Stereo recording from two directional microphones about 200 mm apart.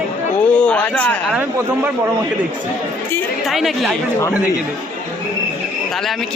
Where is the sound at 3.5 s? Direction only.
Centre (ahead or behind).